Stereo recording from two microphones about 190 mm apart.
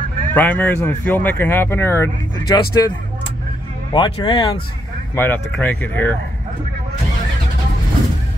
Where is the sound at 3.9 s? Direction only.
25° left (ahead or behind).